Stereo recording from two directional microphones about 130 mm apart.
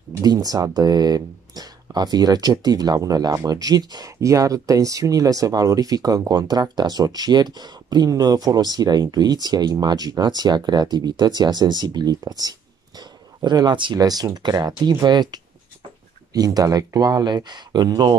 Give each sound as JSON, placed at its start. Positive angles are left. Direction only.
{"t": 0.2, "sound": "speech", "side_deg": -30}